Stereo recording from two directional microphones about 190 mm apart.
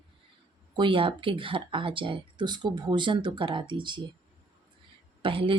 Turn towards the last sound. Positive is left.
turn(degrees=-30)  # may be behind; listen again after turning